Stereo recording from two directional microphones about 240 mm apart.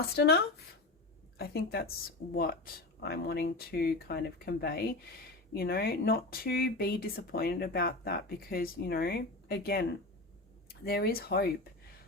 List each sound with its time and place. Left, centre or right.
0.2 s speech: left